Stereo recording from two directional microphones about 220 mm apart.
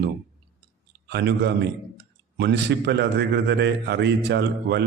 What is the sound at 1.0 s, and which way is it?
A man's voice, 50° right (ahead or behind).